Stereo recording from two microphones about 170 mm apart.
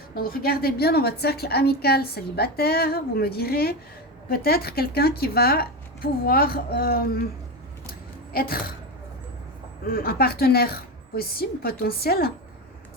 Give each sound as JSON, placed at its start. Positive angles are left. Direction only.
{"t": 0.1, "sound": "a woman's voice", "side_deg": 60}
{"t": 8.3, "sound": "speech", "side_deg": 60}
{"t": 9.8, "sound": "a woman's voice", "side_deg": 60}